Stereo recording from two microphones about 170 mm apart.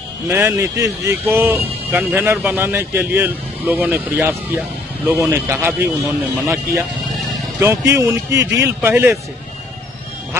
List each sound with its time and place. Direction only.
0.3 s a man's voice: 15° right (ahead or behind)
6.4 s a man's voice: 15° right (ahead or behind)